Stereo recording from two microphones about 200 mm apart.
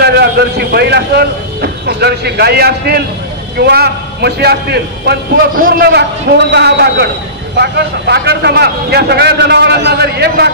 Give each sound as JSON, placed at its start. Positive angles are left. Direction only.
{"t": 0.0, "sound": "a man's voice", "side_deg": -55}